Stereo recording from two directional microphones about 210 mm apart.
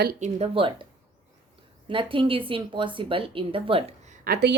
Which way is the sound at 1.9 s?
25° right (ahead or behind).